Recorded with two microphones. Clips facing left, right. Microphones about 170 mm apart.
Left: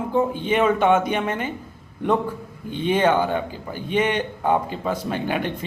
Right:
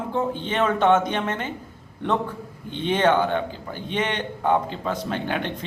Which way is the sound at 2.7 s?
10° left (ahead or behind).